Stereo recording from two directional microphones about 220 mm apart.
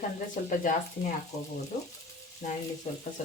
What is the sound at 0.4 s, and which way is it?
Speech, 40° left (ahead or behind).